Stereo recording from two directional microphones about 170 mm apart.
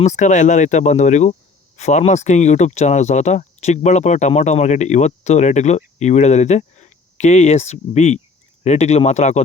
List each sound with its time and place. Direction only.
0.0 s speech: 45° left (ahead or behind)